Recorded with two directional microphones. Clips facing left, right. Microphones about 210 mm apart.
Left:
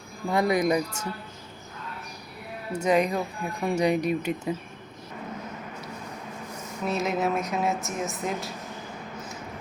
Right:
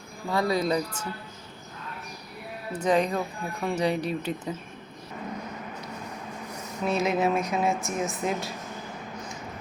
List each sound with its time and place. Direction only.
0.3 s speech: 20° left (ahead or behind)
2.7 s speech: 10° left (ahead or behind)
6.8 s speech: centre (ahead or behind)